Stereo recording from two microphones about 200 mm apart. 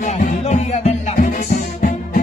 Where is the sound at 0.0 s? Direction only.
35° left (ahead or behind).